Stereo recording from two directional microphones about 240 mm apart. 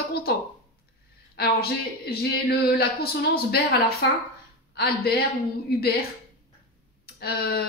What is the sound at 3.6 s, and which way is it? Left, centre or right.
Speech, left.